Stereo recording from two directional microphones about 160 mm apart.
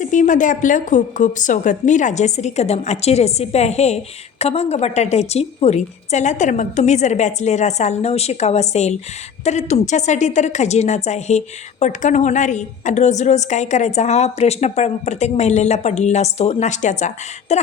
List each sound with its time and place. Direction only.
0.0 s speech: 50° left (ahead or behind)